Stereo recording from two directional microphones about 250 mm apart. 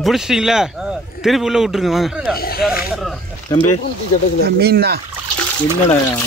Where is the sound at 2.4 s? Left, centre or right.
Left.